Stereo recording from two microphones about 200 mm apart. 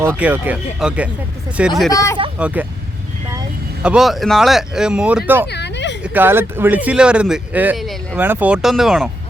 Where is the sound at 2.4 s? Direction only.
5° right (ahead or behind).